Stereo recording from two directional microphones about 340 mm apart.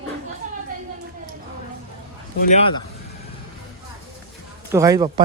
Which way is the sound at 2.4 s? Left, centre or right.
Centre.